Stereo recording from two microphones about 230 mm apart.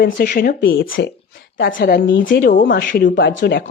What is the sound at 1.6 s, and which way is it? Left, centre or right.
A woman's voice, left.